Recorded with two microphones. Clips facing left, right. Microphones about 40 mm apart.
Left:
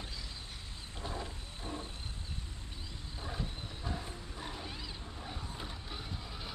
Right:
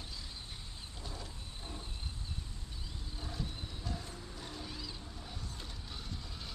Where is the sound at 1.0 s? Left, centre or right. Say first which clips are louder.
Left 7 dB; left.